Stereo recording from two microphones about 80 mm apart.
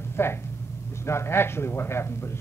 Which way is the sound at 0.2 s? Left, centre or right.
Left.